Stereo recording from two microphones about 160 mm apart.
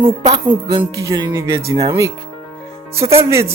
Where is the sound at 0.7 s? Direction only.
25° right (ahead or behind).